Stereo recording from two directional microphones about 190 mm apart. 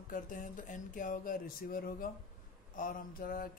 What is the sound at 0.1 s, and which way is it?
Speech, 45° left (ahead or behind).